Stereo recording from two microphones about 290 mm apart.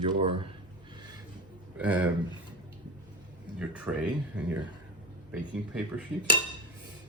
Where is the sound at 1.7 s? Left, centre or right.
Centre.